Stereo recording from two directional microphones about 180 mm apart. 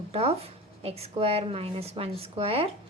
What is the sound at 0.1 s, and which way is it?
A woman's voice, 35° right (ahead or behind).